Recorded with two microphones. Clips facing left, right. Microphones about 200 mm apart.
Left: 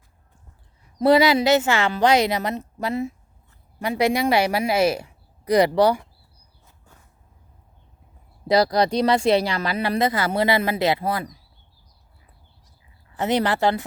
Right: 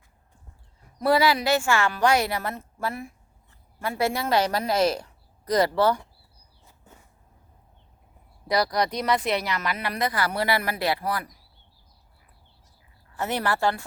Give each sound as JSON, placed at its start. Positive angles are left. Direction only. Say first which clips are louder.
{"t": 0.9, "sound": "a woman's voice", "louder": "left 5 dB", "side_deg": 20}
{"t": 8.4, "sound": "speech", "louder": "left 6 dB", "side_deg": 25}
{"t": 13.1, "sound": "speech", "louder": "left 5 dB", "side_deg": 20}